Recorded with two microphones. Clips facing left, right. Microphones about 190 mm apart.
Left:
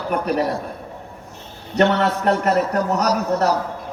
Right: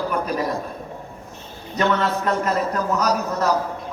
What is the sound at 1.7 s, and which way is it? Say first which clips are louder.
A man's voice: left 4 dB; 65° left (ahead or behind).